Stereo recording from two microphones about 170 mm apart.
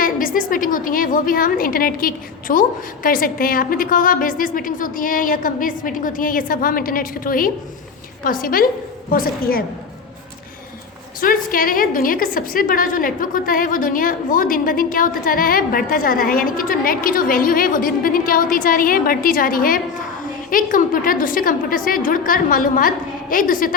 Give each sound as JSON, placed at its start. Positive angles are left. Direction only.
{"t": 0.0, "sound": "a woman's voice", "side_deg": 55}
{"t": 11.2, "sound": "a woman's voice", "side_deg": 55}